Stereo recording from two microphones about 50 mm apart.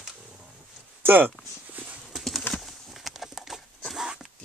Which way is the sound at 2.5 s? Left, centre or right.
Centre.